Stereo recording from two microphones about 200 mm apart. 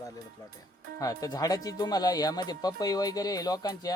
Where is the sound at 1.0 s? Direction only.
15° left (ahead or behind).